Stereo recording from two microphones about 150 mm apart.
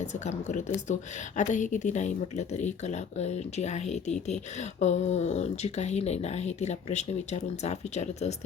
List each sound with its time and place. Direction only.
0.0 s speech: 50° left (ahead or behind)